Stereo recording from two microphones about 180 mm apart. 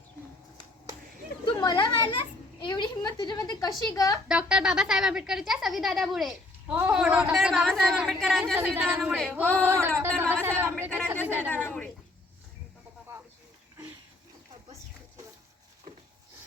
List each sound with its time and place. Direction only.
1.5 s children playing: 25° left (ahead or behind)
2.6 s a woman's voice: 25° left (ahead or behind)
4.3 s a woman's voice: 5° right (ahead or behind)
8.5 s a woman's voice: 10° right (ahead or behind)
9.4 s female singing: 10° right (ahead or behind)
11.4 s a sound: 10° left (ahead or behind)